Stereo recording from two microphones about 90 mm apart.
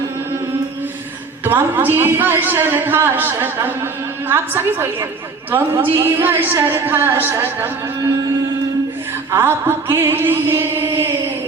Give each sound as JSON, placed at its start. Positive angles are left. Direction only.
{"t": 1.5, "sound": "a man's voice", "side_deg": -25}
{"t": 9.3, "sound": "music", "side_deg": -25}